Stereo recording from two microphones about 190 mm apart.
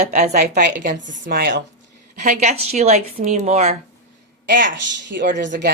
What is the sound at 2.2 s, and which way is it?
A woman's voice, 35° right (ahead or behind).